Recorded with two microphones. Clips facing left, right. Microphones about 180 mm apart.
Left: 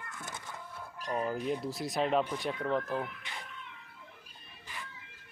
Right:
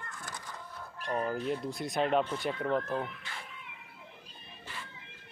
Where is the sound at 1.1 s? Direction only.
10° left (ahead or behind).